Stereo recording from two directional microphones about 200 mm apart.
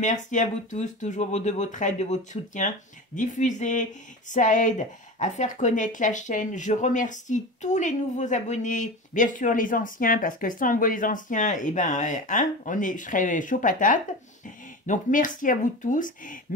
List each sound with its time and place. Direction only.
0.0 s speech: 40° left (ahead or behind)